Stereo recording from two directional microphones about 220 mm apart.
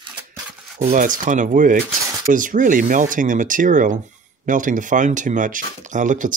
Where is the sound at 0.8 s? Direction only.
35° right (ahead or behind).